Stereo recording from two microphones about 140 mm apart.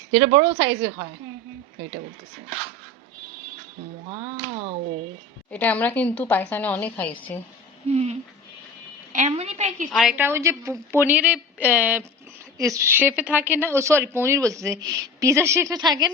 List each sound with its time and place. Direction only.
0.1 s a woman's voice: 45° right (ahead or behind)
5.5 s a woman's voice: 10° left (ahead or behind)
7.9 s a woman's voice: 50° right (ahead or behind)
9.1 s a woman's voice: 55° right (ahead or behind)
9.9 s a woman's voice: centre (ahead or behind)
10.2 s a woman's voice: 15° right (ahead or behind)
12.5 s a woman's voice: 25° right (ahead or behind)